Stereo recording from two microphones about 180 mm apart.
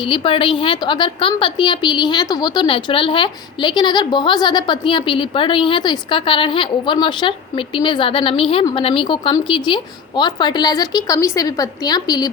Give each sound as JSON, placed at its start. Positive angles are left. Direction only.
{"t": 0.1, "sound": "a woman's voice", "side_deg": 30}